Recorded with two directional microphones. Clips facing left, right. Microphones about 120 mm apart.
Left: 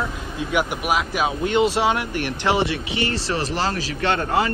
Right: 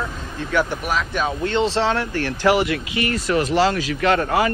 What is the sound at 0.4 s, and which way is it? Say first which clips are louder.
Speech: right 1 dB; 15° left (ahead or behind).